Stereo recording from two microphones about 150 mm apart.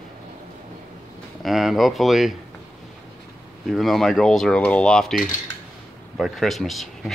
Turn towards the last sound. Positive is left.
turn(degrees=0)  # may be behind; listen again after turning